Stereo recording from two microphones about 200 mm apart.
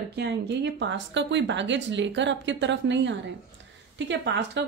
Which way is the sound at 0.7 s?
65° right (ahead or behind).